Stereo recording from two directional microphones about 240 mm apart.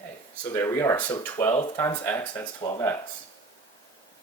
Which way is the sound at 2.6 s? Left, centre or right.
Left.